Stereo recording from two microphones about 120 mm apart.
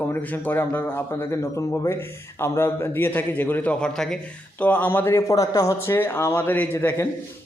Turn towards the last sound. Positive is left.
turn(degrees=20)  # may be behind; listen again after turning